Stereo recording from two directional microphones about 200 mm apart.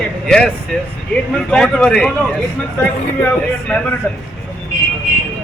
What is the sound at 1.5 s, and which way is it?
Speech, 5° left (ahead or behind).